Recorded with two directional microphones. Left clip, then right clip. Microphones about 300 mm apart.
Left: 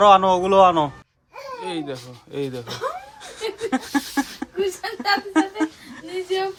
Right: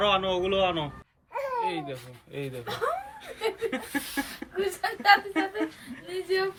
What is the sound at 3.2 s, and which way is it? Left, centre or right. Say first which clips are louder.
Chuckle: left 4 dB; centre.